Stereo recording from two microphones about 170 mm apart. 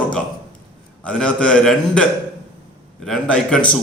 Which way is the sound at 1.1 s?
5° left (ahead or behind).